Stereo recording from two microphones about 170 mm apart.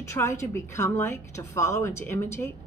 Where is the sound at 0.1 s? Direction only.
15° left (ahead or behind).